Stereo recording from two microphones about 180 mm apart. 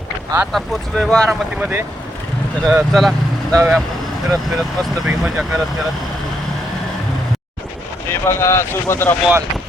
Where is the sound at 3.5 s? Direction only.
15° right (ahead or behind).